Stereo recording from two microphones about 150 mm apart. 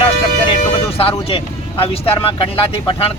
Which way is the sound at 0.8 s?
40° left (ahead or behind).